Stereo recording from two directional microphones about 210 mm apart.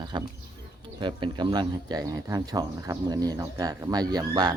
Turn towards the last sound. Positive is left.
turn(degrees=-20)  # may be behind; listen again after turning